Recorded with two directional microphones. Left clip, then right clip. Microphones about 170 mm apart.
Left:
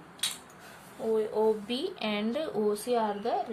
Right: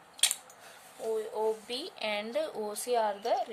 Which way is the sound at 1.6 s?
45° right (ahead or behind).